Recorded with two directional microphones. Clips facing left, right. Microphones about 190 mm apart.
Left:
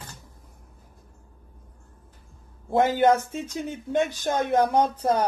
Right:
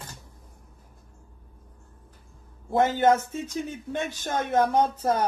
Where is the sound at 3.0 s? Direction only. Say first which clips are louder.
Left 1 dB; 20° left (ahead or behind).